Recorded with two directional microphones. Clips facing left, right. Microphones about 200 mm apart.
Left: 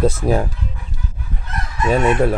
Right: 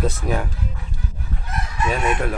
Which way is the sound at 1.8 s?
40° left (ahead or behind).